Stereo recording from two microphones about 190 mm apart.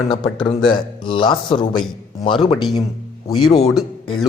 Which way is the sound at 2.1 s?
25° left (ahead or behind).